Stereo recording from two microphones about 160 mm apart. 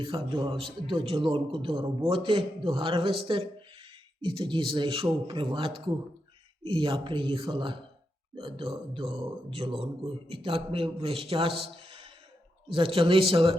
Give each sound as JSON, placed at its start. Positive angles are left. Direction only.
{"t": 0.0, "sound": "a man's voice", "side_deg": -35}